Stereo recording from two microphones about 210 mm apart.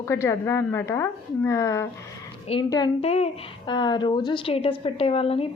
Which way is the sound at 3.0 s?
30° left (ahead or behind).